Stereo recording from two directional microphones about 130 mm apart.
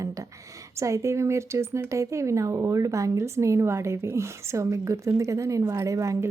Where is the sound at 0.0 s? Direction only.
25° right (ahead or behind).